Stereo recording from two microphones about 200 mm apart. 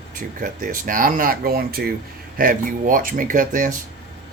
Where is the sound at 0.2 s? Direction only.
45° right (ahead or behind).